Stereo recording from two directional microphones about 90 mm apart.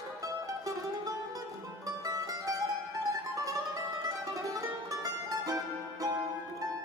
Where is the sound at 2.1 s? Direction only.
40° right (ahead or behind).